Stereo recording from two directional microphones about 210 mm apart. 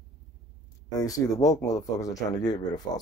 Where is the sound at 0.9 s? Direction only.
15° left (ahead or behind).